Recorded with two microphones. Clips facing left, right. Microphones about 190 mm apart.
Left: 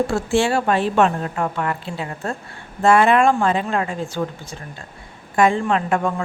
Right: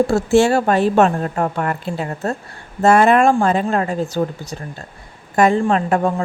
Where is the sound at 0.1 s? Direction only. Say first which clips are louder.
Right 5 dB; 40° right (ahead or behind).